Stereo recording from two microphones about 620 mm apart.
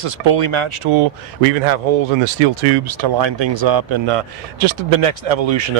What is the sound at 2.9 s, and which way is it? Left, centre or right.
Speech, right.